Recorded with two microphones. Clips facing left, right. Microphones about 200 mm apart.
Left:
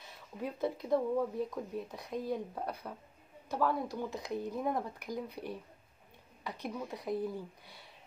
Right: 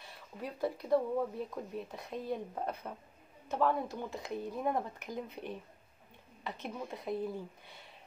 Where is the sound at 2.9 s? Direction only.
10° right (ahead or behind).